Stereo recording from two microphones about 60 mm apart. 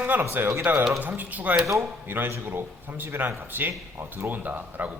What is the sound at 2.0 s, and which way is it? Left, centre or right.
A man's voice, right.